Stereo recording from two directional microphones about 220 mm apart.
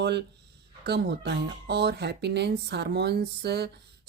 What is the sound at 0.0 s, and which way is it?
Speech, 50° right (ahead or behind).